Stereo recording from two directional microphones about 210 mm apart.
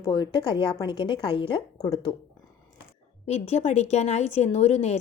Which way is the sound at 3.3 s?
30° left (ahead or behind).